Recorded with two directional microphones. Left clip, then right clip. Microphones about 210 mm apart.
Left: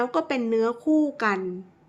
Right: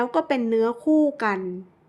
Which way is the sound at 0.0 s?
20° right (ahead or behind).